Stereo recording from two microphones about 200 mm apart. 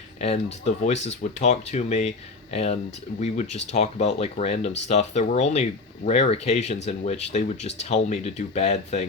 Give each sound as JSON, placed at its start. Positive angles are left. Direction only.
{"t": 0.2, "sound": "speech", "side_deg": 30}